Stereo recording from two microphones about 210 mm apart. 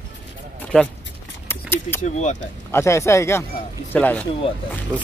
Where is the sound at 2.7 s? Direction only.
15° left (ahead or behind).